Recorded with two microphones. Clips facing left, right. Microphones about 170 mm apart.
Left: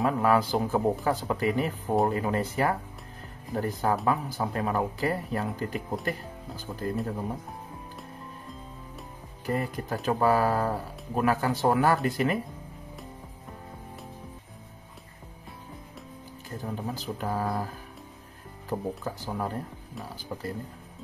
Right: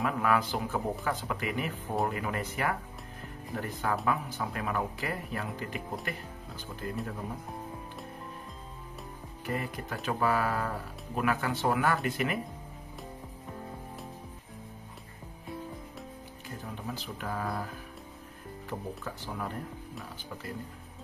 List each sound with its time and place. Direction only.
0.0 s speech: 35° left (ahead or behind)
9.5 s speech: 40° left (ahead or behind)
16.4 s speech: 40° left (ahead or behind)
18.7 s speech: 40° left (ahead or behind)